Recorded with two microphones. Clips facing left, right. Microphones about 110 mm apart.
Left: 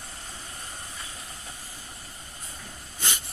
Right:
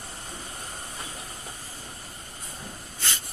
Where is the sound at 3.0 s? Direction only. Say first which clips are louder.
Left 1 dB; 15° left (ahead or behind).